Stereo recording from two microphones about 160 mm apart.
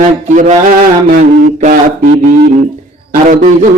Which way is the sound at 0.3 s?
50° right (ahead or behind).